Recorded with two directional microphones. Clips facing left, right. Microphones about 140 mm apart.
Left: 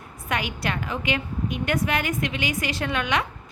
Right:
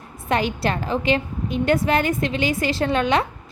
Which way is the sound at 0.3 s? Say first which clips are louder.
Right 6 dB; 30° right (ahead or behind).